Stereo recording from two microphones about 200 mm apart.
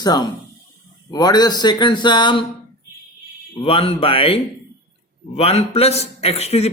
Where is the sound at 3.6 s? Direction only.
30° left (ahead or behind).